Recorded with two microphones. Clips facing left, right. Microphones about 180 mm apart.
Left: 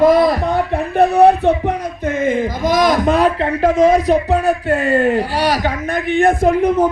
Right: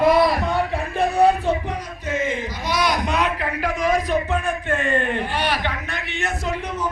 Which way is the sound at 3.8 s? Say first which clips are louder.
Left 8 dB; 40° left (ahead or behind).